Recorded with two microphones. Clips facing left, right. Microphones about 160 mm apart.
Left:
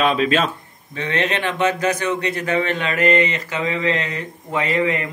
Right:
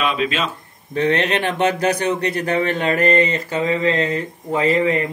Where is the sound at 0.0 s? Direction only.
45° left (ahead or behind).